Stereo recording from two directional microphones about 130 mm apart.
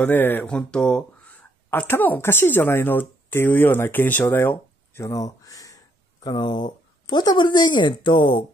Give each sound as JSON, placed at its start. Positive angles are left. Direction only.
{"t": 0.0, "sound": "speech", "side_deg": 15}